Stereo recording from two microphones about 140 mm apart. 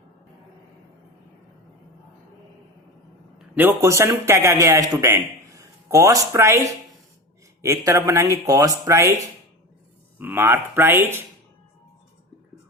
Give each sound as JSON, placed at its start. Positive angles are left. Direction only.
{"t": 3.3, "sound": "a man's voice", "side_deg": -15}
{"t": 10.2, "sound": "speech", "side_deg": -15}